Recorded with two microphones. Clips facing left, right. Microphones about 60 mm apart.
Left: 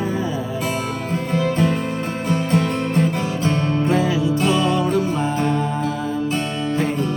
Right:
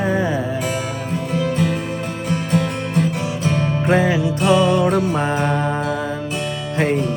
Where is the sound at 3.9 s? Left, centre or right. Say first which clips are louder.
Right 5 dB; right.